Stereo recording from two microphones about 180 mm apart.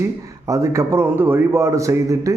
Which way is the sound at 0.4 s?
15° right (ahead or behind).